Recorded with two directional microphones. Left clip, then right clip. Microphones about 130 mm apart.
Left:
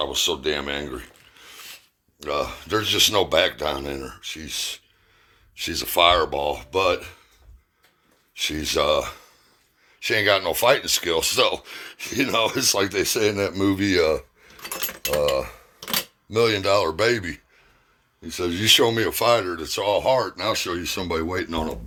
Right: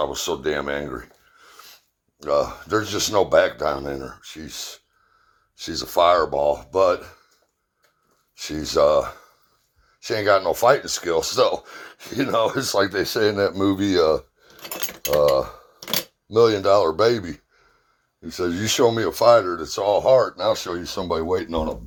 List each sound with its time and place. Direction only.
0.0 s a sound: centre (ahead or behind)
2.1 s speech: 5° left (ahead or behind)
8.4 s speech: 10° left (ahead or behind)